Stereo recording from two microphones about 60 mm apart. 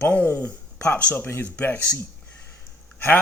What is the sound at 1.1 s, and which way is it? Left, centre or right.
Speech, left.